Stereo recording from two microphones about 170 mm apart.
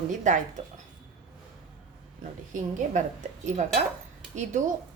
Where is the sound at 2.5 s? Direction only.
45° right (ahead or behind).